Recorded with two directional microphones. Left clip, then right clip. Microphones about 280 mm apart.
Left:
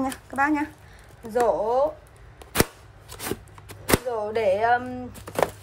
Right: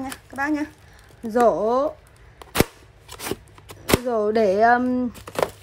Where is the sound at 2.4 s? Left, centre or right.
Centre.